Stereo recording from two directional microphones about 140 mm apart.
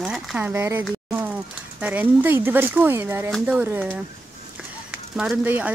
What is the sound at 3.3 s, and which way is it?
Speech, 5° right (ahead or behind).